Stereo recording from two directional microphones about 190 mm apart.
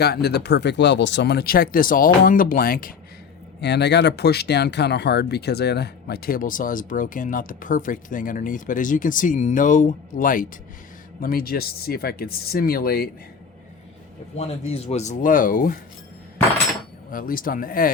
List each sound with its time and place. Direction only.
0.0 s speech: 60° left (ahead or behind)
3.6 s speech: 65° left (ahead or behind)
14.3 s speech: 35° left (ahead or behind)
17.1 s speech: 45° left (ahead or behind)